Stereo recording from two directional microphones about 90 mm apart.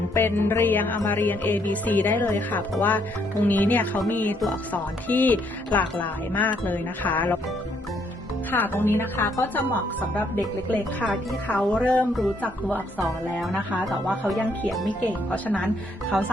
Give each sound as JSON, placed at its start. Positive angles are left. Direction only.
{"t": 0.1, "sound": "music", "side_deg": 25}
{"t": 4.7, "sound": "speech", "side_deg": 20}
{"t": 6.7, "sound": "music", "side_deg": 20}
{"t": 8.4, "sound": "music", "side_deg": 20}
{"t": 10.7, "sound": "speech", "side_deg": 15}
{"t": 13.0, "sound": "speech", "side_deg": 0}
{"t": 14.8, "sound": "speech", "side_deg": 15}